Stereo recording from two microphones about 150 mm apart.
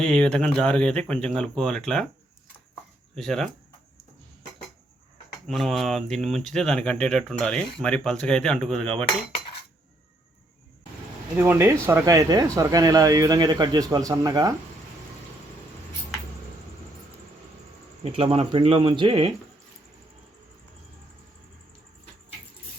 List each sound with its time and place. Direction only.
0.0 s speech: 5° left (ahead or behind)
3.2 s speech: centre (ahead or behind)
5.5 s speech: centre (ahead or behind)
11.3 s speech: 15° right (ahead or behind)
18.0 s speech: 40° right (ahead or behind)